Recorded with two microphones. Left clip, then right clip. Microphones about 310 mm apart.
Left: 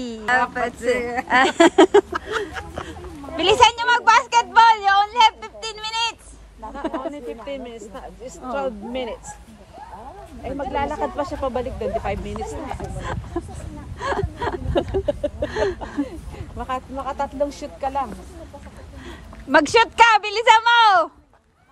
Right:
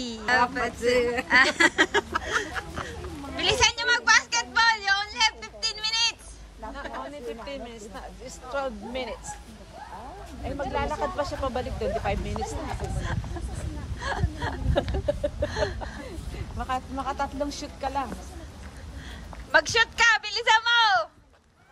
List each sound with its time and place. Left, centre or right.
0.0 s a woman's voice: centre
7.4 s speech: left
10.4 s speech: left
13.9 s a sound: centre
16.5 s speech: left
19.0 s speech: centre